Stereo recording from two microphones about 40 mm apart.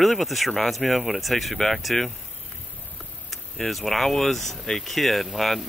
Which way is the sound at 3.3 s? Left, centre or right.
Centre.